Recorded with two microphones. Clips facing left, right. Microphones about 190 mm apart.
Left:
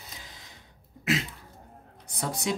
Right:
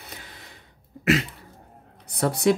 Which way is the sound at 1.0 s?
65° right (ahead or behind).